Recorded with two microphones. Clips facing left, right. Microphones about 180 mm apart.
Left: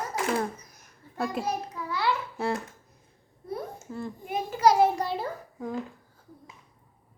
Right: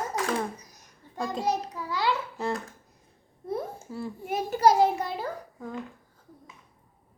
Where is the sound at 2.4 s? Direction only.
10° left (ahead or behind).